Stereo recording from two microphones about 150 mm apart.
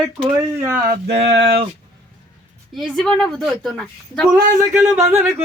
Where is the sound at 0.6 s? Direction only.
15° right (ahead or behind).